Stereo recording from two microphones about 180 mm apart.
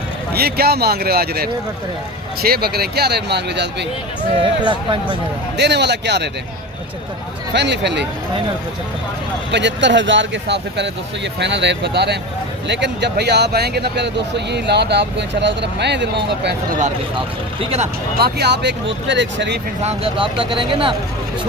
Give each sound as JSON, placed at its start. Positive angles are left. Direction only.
{"t": 0.3, "sound": "speech", "side_deg": -60}
{"t": 4.4, "sound": "speech", "side_deg": -25}
{"t": 5.5, "sound": "speech", "side_deg": -70}
{"t": 7.5, "sound": "speech", "side_deg": -70}
{"t": 9.5, "sound": "speech", "side_deg": -80}
{"t": 17.2, "sound": "speech", "side_deg": -35}
{"t": 18.2, "sound": "speech", "side_deg": -65}
{"t": 19.0, "sound": "speech", "side_deg": -85}
{"t": 19.8, "sound": "speech", "side_deg": -35}